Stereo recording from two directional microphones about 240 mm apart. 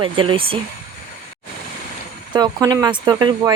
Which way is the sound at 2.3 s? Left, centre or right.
Centre.